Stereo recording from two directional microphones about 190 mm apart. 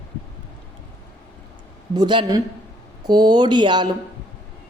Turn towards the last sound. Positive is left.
turn(degrees=-25)  # may be behind; listen again after turning